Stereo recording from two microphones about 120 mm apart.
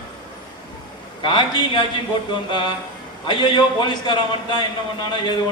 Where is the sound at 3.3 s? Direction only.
40° left (ahead or behind).